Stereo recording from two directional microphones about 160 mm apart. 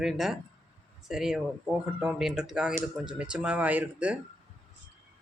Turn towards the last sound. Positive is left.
turn(degrees=-10)  # may be behind; listen again after turning